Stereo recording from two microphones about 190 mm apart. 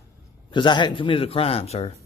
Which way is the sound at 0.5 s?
25° left (ahead or behind).